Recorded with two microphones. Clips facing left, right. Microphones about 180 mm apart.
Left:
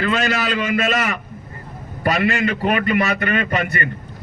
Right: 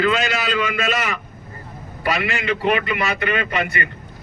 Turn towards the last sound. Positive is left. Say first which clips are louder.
# left 2 dB
turn(degrees=45)  # may be behind; listen again after turning